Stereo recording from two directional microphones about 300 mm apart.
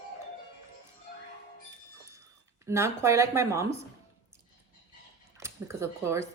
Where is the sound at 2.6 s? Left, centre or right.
Centre.